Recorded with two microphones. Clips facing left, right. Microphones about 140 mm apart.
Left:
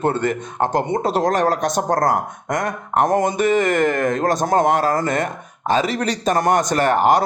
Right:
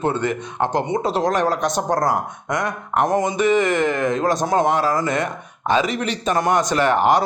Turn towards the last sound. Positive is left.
turn(degrees=45)  # may be behind; listen again after turning